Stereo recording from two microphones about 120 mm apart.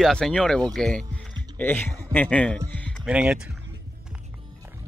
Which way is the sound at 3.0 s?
10° right (ahead or behind).